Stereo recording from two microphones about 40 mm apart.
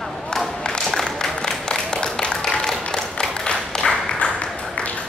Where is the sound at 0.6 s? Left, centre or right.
Left.